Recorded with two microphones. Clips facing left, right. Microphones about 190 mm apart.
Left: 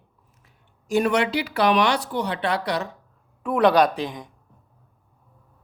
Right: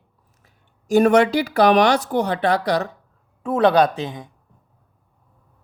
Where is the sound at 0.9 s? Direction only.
45° right (ahead or behind).